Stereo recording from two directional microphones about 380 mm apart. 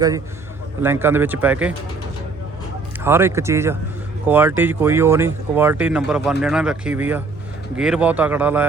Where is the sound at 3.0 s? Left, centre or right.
Centre.